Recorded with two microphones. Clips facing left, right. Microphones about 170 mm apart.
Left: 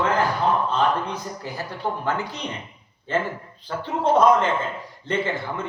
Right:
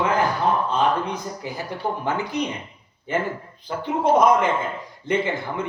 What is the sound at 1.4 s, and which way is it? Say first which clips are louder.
Speech: right 2 dB; 15° right (ahead or behind).